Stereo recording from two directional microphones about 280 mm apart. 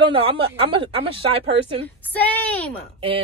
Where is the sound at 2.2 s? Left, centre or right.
Centre.